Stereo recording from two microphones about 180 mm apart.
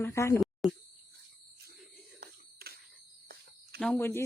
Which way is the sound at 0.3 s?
Centre (ahead or behind).